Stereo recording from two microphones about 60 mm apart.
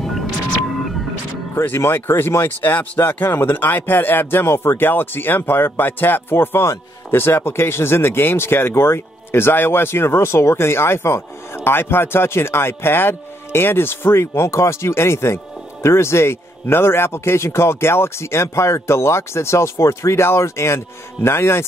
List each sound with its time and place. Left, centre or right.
1.5 s speech: left